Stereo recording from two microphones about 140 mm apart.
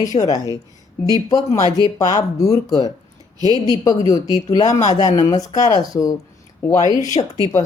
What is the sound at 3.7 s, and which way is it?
Speech, 25° left (ahead or behind).